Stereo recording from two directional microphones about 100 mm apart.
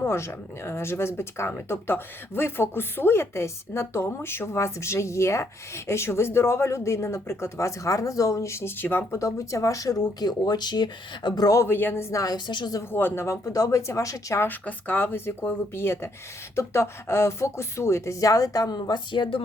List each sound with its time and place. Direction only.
0.0 s speech: 25° left (ahead or behind); by 11.4 s 50° left (ahead or behind)
11.4 s speech: 30° left (ahead or behind)
12.5 s speech: 50° left (ahead or behind)
12.9 s speech: 20° left (ahead or behind)
14.4 s speech: 15° left (ahead or behind); by 19.4 s 55° left (ahead or behind)